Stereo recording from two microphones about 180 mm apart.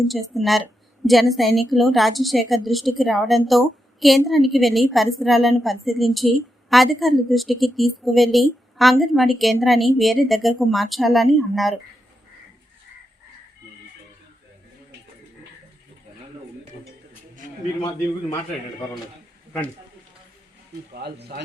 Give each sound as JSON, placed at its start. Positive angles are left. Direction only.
{"t": 0.1, "sound": "a woman's voice", "side_deg": 0}
{"t": 17.7, "sound": "a man's voice", "side_deg": 20}
{"t": 20.9, "sound": "speech", "side_deg": -60}